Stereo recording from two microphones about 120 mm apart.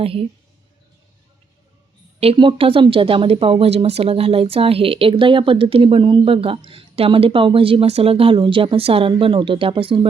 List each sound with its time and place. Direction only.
0.0 s speech: 50° right (ahead or behind)
2.2 s speech: 50° right (ahead or behind)